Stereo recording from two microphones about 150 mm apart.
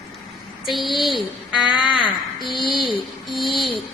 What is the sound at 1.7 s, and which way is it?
Speech, 30° left (ahead or behind).